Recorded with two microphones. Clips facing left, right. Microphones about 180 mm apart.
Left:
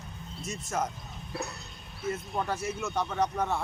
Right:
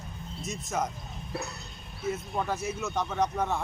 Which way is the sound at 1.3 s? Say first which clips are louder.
Even; 25° right (ahead or behind).